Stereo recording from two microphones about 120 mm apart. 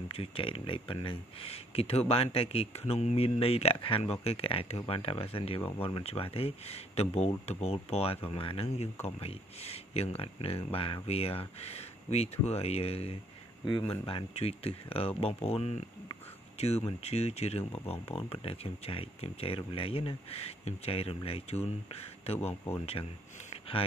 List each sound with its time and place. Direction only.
0.1 s speech: 50° left (ahead or behind)
23.0 s speech: 35° left (ahead or behind)